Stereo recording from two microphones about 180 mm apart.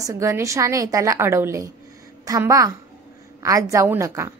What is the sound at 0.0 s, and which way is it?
A woman's voice, 15° right (ahead or behind).